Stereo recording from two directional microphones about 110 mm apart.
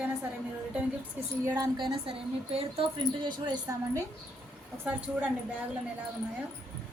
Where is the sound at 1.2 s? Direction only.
15° right (ahead or behind).